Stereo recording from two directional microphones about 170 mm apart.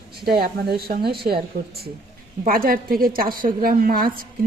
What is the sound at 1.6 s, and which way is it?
A woman's voice, 55° right (ahead or behind).